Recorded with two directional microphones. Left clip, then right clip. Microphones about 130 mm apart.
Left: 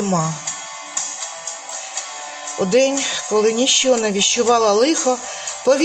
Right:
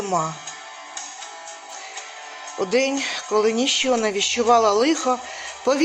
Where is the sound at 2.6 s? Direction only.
40° right (ahead or behind).